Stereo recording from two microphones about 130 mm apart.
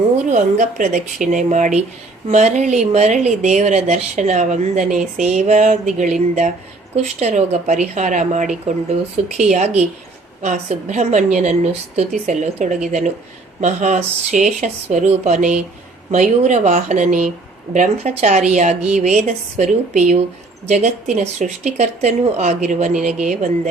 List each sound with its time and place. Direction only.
0.3 s speech: 80° right